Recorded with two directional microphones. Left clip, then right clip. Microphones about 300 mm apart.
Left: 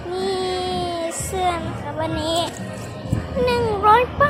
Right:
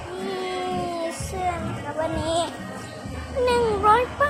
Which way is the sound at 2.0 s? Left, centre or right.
Centre.